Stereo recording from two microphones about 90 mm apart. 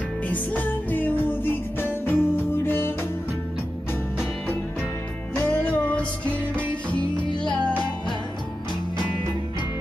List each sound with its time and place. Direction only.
0.3 s music: 20° left (ahead or behind)
5.3 s music: 15° left (ahead or behind)